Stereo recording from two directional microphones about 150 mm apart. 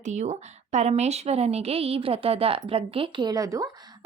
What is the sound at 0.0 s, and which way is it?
A woman's voice, 50° right (ahead or behind).